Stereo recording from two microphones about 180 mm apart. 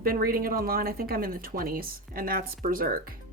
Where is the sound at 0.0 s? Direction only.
55° right (ahead or behind).